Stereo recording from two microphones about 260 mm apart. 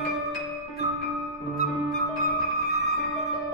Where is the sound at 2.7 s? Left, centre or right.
Left.